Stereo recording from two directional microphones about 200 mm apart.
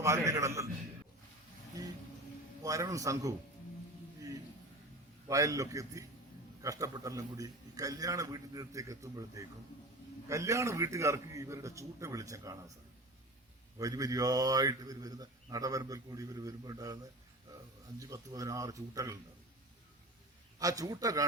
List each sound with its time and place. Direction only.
0.3 s speech: 15° right (ahead or behind)
1.8 s a sound: 15° right (ahead or behind)
2.6 s speech: 15° right (ahead or behind)
5.3 s speech: 15° right (ahead or behind)
13.7 s speech: 15° right (ahead or behind)
20.6 s speech: 15° right (ahead or behind)